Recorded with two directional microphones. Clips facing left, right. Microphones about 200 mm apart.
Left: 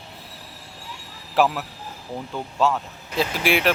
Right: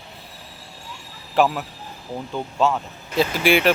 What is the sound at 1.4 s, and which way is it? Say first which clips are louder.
Speech: right 1 dB; centre (ahead or behind).